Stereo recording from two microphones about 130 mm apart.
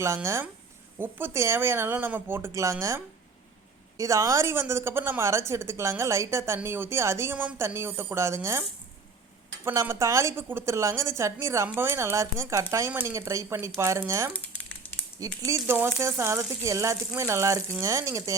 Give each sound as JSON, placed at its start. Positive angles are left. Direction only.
{"t": 0.0, "sound": "a woman's voice", "side_deg": -20}
{"t": 9.6, "sound": "a woman's voice", "side_deg": -20}